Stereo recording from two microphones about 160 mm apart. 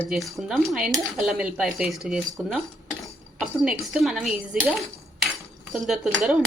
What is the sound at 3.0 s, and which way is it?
Dishes, 5° right (ahead or behind).